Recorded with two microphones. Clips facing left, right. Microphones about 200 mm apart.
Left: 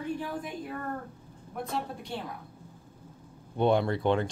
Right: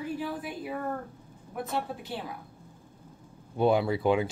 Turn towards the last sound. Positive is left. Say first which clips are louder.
# right 1 dB
turn(degrees=-5)  # may be behind; listen again after turning